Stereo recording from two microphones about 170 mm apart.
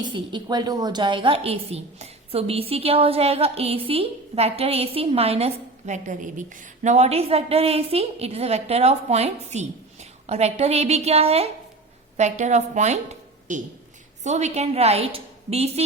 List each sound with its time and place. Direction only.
0.0 s a woman's voice: 25° right (ahead or behind)